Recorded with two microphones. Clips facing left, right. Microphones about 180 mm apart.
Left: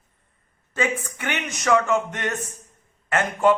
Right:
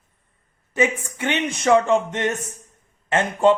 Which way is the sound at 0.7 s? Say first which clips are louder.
Right 4 dB; 20° right (ahead or behind).